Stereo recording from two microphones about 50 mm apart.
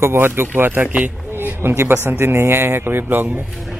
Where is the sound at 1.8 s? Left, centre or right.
Right.